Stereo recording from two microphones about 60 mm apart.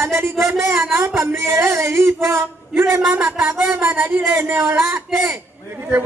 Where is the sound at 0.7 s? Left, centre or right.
Right.